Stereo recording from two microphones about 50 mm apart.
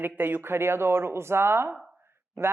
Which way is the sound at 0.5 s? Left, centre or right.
Right.